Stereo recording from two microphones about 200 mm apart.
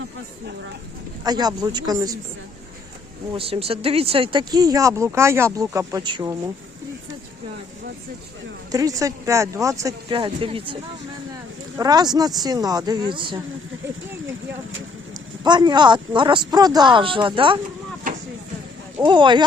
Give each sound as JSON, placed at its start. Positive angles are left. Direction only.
{"t": 1.2, "sound": "speech", "side_deg": -20}
{"t": 3.3, "sound": "speech", "side_deg": -30}
{"t": 8.7, "sound": "speech", "side_deg": -15}
{"t": 11.8, "sound": "speech", "side_deg": -20}
{"t": 15.4, "sound": "speech", "side_deg": -20}
{"t": 19.0, "sound": "speech", "side_deg": -25}